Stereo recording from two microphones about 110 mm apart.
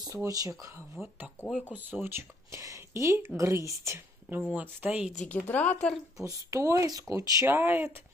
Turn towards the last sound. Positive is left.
turn(degrees=-20)  # may be behind; listen again after turning